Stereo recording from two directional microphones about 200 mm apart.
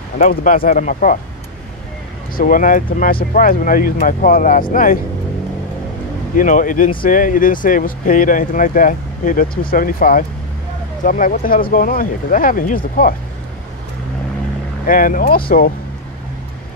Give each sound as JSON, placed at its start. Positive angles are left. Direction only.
{"t": 0.2, "sound": "speech", "side_deg": 45}
{"t": 2.3, "sound": "speech", "side_deg": 45}
{"t": 6.3, "sound": "speech", "side_deg": 40}
{"t": 14.9, "sound": "speech", "side_deg": 45}